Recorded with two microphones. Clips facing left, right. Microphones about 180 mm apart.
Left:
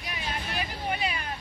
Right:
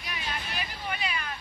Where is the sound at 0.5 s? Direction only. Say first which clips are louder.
Left 4 dB; 35° left (ahead or behind).